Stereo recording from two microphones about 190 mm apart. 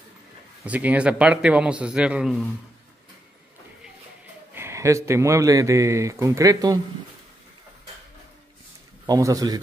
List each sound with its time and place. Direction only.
0.7 s a man's voice: 5° right (ahead or behind)
4.6 s speech: 15° right (ahead or behind)
9.0 s speech: 20° right (ahead or behind)